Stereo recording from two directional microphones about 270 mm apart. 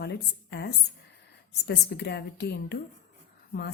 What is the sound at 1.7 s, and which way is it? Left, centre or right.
A woman's voice, left.